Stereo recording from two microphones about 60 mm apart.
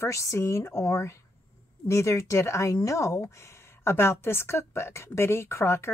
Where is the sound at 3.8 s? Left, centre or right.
Left.